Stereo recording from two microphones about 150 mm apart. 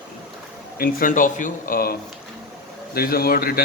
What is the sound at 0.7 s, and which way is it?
Speech, 75° left (ahead or behind).